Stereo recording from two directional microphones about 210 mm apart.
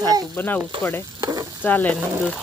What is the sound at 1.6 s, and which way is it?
Speech, 5° left (ahead or behind).